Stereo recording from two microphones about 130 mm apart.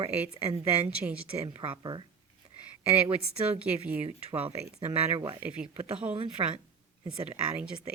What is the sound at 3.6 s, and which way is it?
Speech, 15° right (ahead or behind).